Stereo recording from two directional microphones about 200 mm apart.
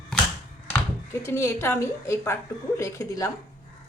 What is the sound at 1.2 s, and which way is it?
Speech, 15° left (ahead or behind).